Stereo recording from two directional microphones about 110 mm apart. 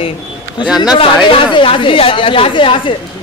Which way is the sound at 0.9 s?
50° left (ahead or behind).